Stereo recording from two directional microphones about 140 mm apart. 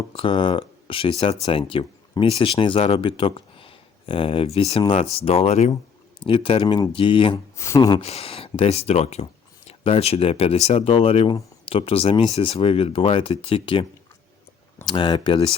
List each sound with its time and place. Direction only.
0.1 s speech: 40° left (ahead or behind)
6.2 s speech: 40° left (ahead or behind)
7.5 s speech: 20° left (ahead or behind)
7.8 s speech: 30° left (ahead or behind)
8.0 s speech: 45° left (ahead or behind)
14.8 s speech: 35° left (ahead or behind)